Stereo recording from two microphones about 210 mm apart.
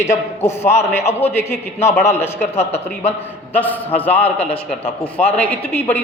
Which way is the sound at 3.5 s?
10° left (ahead or behind).